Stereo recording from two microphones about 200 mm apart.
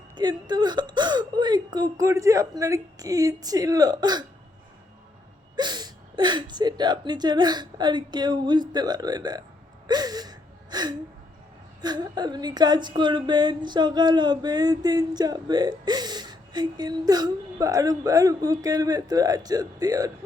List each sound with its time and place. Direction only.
0.2 s speech: 20° right (ahead or behind)
5.5 s speech: 20° right (ahead or behind)
9.8 s gasp: 20° right (ahead or behind)
11.8 s speech: 20° right (ahead or behind)